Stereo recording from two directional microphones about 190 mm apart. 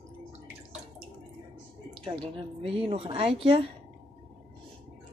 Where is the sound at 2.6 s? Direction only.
30° right (ahead or behind).